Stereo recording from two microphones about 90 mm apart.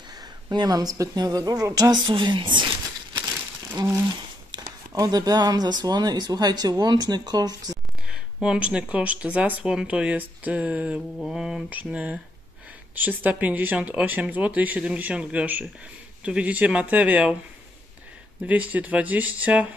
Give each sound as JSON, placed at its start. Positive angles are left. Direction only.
{"t": 0.5, "sound": "a woman's voice", "side_deg": -50}
{"t": 2.0, "sound": "speech", "side_deg": -65}
{"t": 3.7, "sound": "speech", "side_deg": -35}
{"t": 4.5, "sound": "a woman's voice", "side_deg": -45}
{"t": 8.1, "sound": "speech", "side_deg": -10}
{"t": 11.1, "sound": "mantra", "side_deg": -5}
{"t": 11.7, "sound": "speech", "side_deg": -15}
{"t": 18.4, "sound": "speech", "side_deg": -15}